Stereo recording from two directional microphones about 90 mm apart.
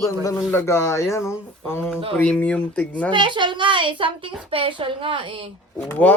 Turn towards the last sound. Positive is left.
turn(degrees=15)  # may be behind; listen again after turning